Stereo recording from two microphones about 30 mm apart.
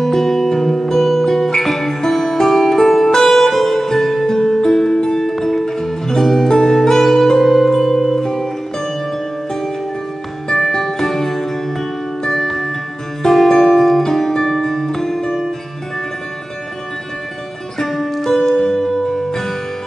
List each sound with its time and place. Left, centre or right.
0.0 s music: centre
7.4 s harp: centre
8.2 s music: centre
10.6 s music: centre
17.7 s music: centre